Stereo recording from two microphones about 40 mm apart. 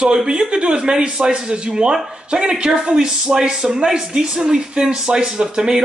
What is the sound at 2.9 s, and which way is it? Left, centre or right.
Speech, centre.